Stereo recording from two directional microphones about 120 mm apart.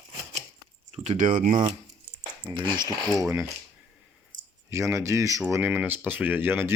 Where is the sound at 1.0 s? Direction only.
80° right.